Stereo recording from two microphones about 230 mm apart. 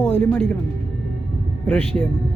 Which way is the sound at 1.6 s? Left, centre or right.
Centre.